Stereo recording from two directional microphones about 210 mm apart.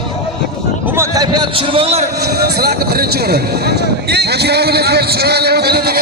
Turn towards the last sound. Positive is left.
turn(degrees=-50)  # may be behind; listen again after turning